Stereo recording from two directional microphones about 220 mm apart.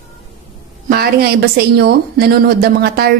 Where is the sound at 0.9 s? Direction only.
45° right (ahead or behind).